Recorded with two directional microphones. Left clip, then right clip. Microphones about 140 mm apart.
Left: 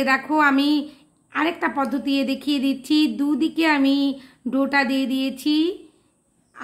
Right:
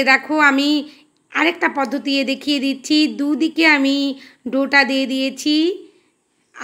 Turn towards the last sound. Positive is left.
turn(degrees=-15)  # may be behind; listen again after turning